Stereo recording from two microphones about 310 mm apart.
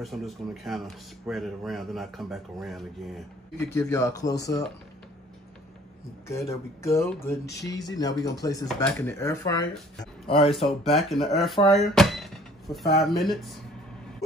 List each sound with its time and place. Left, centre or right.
0.0 s speech: centre
6.2 s speech: centre
10.5 s speech: centre